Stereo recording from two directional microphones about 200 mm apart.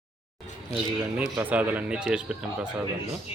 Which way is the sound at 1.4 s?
5° right (ahead or behind).